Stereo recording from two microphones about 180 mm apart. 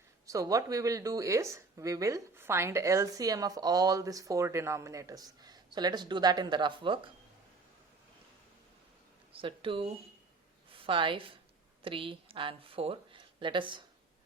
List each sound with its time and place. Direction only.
0.3 s speech: 20° right (ahead or behind)
9.3 s a woman's voice: 30° right (ahead or behind)